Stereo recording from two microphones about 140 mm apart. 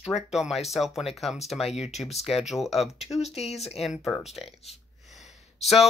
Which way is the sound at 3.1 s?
50° left (ahead or behind).